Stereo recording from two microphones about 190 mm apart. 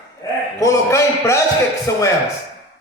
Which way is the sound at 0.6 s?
15° left (ahead or behind).